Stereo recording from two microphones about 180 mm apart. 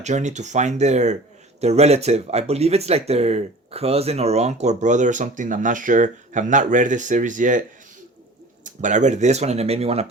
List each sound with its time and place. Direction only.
0.0 s speech: 40° right (ahead or behind)
8.6 s speech: 45° right (ahead or behind)